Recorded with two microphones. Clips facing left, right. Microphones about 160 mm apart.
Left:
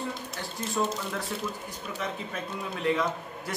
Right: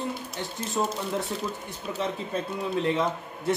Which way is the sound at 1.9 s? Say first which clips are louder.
Right 5 dB; 30° right (ahead or behind).